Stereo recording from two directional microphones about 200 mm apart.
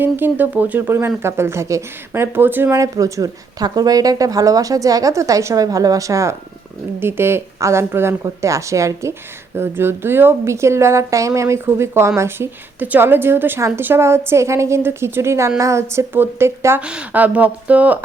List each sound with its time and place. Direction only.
0.0 s speech: 10° right (ahead or behind)